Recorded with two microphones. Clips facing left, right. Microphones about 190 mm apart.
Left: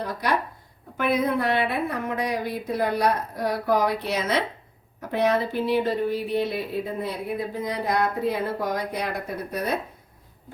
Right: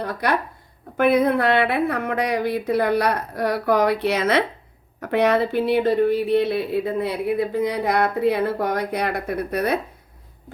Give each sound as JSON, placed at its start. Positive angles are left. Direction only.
{"t": 0.9, "sound": "speech", "side_deg": -60}